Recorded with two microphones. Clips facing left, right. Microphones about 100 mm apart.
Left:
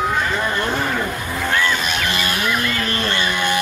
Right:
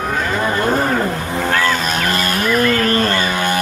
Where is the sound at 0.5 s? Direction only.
40° right (ahead or behind).